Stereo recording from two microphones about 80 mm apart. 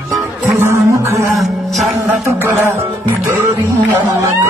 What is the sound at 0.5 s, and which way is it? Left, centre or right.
Music, right.